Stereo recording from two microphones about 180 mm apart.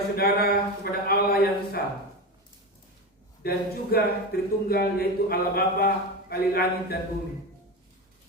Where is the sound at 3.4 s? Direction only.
60° left (ahead or behind).